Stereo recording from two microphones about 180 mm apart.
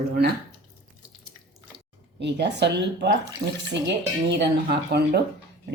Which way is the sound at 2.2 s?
70° right (ahead or behind).